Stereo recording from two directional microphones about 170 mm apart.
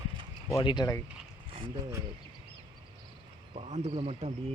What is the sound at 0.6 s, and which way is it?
Speech, 25° left (ahead or behind).